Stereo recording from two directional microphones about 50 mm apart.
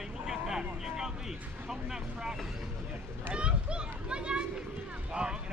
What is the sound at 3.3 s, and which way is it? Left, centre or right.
Children playing, right.